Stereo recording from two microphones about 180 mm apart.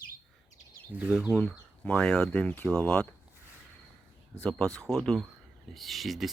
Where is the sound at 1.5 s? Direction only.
5° left (ahead or behind).